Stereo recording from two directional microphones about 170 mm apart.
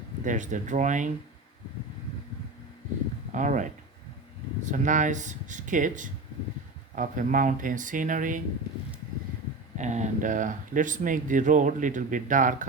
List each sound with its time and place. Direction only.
0.3 s speech: 45° right (ahead or behind)
3.3 s speech: 50° right (ahead or behind)
9.7 s speech: 45° right (ahead or behind)